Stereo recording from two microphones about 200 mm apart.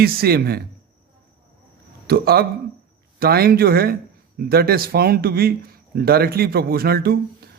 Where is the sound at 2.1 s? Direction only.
50° right (ahead or behind).